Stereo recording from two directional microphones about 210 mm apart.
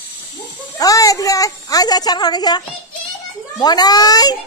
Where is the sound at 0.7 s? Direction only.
15° left (ahead or behind).